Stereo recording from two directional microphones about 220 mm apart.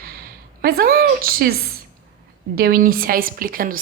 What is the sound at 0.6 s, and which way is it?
Speech, 45° right (ahead or behind).